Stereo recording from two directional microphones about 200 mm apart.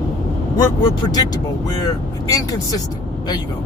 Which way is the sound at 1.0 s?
20° left (ahead or behind).